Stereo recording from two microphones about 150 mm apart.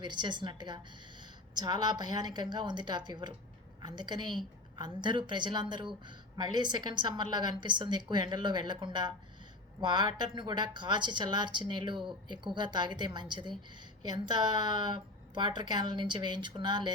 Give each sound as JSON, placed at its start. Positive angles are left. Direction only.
{"t": 0.0, "sound": "a woman's voice", "side_deg": -30}